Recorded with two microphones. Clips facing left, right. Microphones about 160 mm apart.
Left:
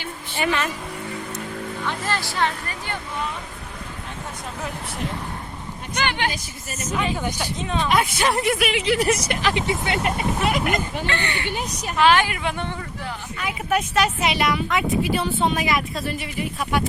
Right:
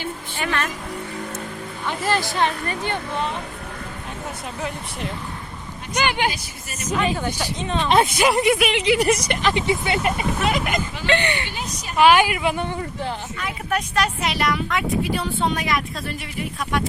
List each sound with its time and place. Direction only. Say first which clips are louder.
0.3 s a woman's voice: left 3 dB; 5° left (ahead or behind)
1.9 s speech: right 6 dB; 15° right (ahead or behind)
5.9 s a woman's voice: right 3 dB; 10° right (ahead or behind)
6.9 s speech: right 2 dB; 15° left (ahead or behind)
7.9 s speech: right 4 dB; 25° right (ahead or behind)
8.2 s speech: right 3 dB; centre (ahead or behind)
11.0 s a woman's voice: right 4 dB; 20° right (ahead or behind)
13.4 s speech: left 3 dB; 5° left (ahead or behind)